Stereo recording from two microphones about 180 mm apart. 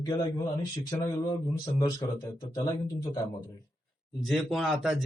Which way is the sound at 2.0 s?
25° left (ahead or behind).